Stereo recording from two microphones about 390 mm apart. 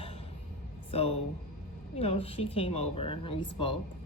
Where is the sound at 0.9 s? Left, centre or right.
Centre.